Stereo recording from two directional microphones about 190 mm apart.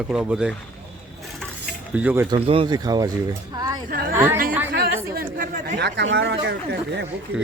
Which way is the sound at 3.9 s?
50° right (ahead or behind).